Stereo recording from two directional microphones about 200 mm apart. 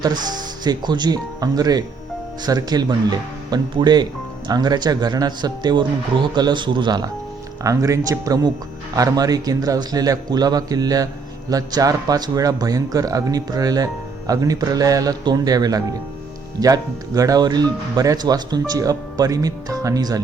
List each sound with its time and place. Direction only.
0.0 s a man's voice: 20° right (ahead or behind)